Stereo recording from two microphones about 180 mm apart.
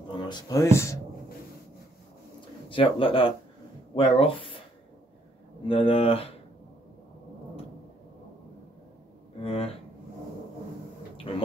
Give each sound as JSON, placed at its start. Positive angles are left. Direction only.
{"t": 0.2, "sound": "speech", "side_deg": 20}
{"t": 2.7, "sound": "speech", "side_deg": 30}
{"t": 5.7, "sound": "speech", "side_deg": 30}
{"t": 9.4, "sound": "speech", "side_deg": 35}
{"t": 11.3, "sound": "speech", "side_deg": 30}